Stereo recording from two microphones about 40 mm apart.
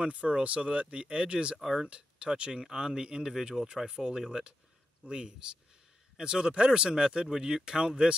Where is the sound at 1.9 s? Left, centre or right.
Right.